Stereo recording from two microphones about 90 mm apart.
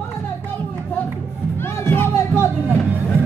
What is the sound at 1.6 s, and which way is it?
Music, 25° left (ahead or behind).